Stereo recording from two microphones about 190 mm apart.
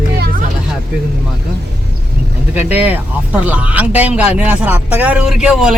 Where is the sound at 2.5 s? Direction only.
10° right (ahead or behind).